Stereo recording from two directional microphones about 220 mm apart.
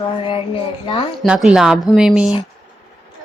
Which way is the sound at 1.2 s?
5° right (ahead or behind).